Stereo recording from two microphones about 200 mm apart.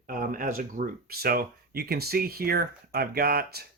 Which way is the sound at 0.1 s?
45° right (ahead or behind).